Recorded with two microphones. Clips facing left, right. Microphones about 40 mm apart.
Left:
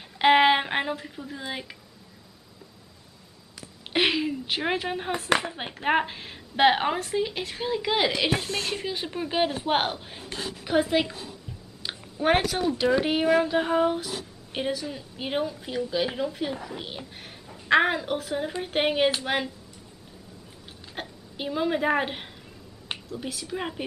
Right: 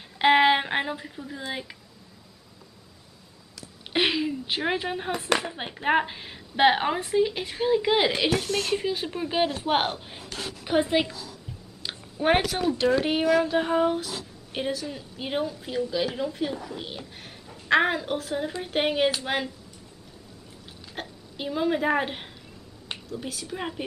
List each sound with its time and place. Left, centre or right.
0.2 s a woman's voice: centre
3.9 s a sound: centre
5.5 s a woman's voice: centre
8.3 s a woman's voice: left
8.8 s a woman's voice: centre
10.6 s a woman's voice: centre
11.8 s a sound: centre
12.4 s a woman's voice: centre
20.9 s a woman's voice: centre